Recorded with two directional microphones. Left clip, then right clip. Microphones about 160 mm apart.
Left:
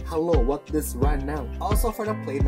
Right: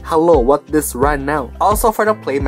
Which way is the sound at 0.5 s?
10° right (ahead or behind).